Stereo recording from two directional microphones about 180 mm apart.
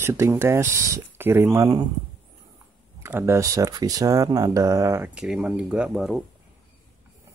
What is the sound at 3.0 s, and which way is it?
Speech, 15° right (ahead or behind).